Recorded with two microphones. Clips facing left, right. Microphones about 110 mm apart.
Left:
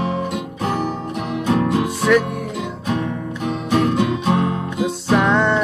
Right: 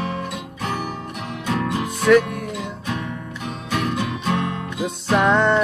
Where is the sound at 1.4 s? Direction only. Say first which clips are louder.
Left 5 dB; 20° left (ahead or behind).